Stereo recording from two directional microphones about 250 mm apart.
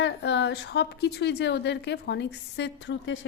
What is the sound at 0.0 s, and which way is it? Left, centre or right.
A woman's voice, left.